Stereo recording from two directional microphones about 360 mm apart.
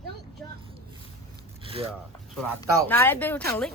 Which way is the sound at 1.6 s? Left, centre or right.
Centre.